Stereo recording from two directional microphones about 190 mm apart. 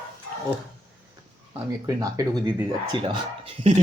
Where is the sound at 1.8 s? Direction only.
20° right (ahead or behind).